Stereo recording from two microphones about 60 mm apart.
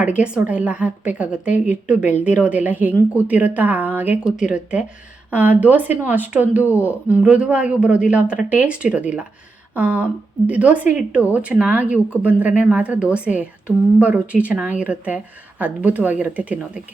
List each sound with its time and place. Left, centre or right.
0.2 s a woman's voice: right
4.2 s a woman's voice: centre